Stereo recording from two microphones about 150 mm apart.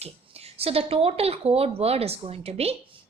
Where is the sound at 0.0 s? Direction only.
40° right (ahead or behind).